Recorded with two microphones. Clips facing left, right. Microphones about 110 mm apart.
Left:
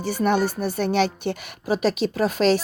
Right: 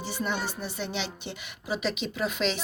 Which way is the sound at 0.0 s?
50° left (ahead or behind).